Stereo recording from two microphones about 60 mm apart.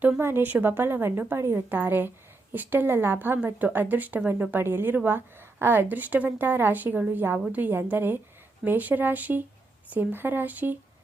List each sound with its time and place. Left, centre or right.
0.2 s a woman's voice: right